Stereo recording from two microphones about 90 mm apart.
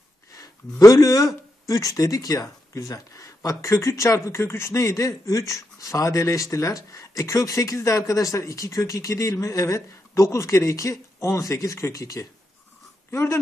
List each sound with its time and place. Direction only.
0.4 s a man's voice: 40° left (ahead or behind)